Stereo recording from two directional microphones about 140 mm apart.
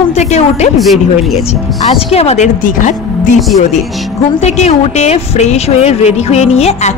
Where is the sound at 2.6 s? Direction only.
65° left (ahead or behind).